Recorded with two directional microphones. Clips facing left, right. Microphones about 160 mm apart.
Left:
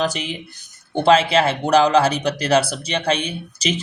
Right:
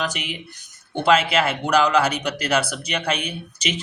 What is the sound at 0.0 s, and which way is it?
Speech, 35° left (ahead or behind).